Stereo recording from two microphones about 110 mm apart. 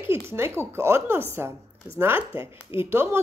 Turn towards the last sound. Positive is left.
turn(degrees=-20)  # may be behind; listen again after turning